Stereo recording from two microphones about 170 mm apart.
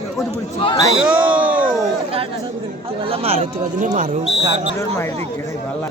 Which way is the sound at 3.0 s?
35° right (ahead or behind).